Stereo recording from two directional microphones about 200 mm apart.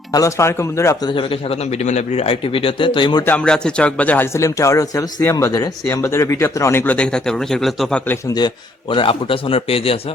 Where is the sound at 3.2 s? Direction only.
5° left (ahead or behind).